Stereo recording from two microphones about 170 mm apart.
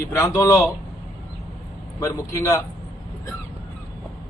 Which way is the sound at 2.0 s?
20° left (ahead or behind).